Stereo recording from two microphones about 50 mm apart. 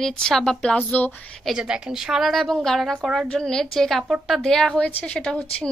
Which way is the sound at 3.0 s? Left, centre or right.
Centre.